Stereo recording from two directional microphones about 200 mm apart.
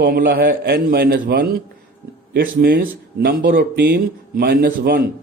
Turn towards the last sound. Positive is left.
turn(degrees=-50)  # may be behind; listen again after turning